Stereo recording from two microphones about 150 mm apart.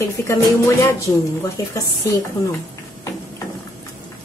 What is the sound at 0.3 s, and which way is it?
A woman's voice, 20° left (ahead or behind).